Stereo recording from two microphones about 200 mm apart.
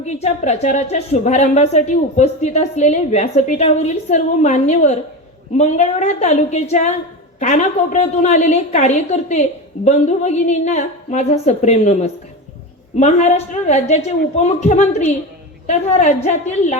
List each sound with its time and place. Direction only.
0.0 s a woman's voice: 35° left (ahead or behind)
13.0 s a woman's voice: 35° left (ahead or behind)